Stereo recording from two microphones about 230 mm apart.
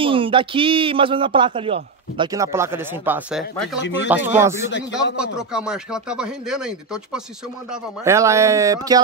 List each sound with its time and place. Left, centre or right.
0.0 s speech: right